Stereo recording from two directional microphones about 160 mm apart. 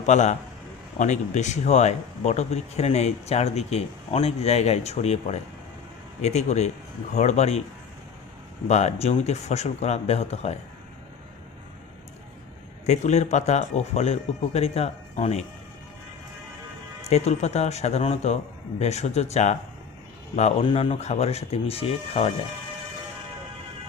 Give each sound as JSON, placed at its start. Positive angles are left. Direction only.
{"t": 0.0, "sound": "speech", "side_deg": 45}
{"t": 8.6, "sound": "speech", "side_deg": 45}
{"t": 12.8, "sound": "speech", "side_deg": 45}
{"t": 17.0, "sound": "speech", "side_deg": 40}